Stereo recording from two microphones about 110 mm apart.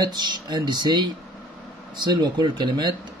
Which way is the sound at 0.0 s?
45° right (ahead or behind).